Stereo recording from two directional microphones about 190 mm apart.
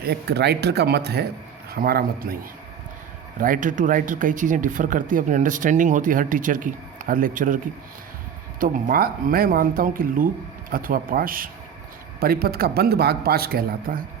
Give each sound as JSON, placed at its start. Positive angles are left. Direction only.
{"t": 0.0, "sound": "speech", "side_deg": -60}